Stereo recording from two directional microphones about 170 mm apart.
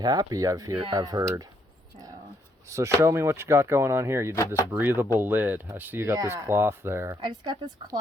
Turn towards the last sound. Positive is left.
turn(degrees=-25)  # may be behind; listen again after turning